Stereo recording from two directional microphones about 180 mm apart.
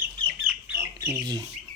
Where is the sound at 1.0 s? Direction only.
20° right (ahead or behind).